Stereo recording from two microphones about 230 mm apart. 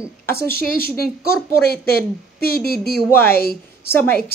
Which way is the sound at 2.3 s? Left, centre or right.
Right.